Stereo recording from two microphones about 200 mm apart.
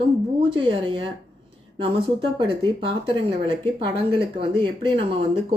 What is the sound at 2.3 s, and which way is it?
Speech, 25° right (ahead or behind).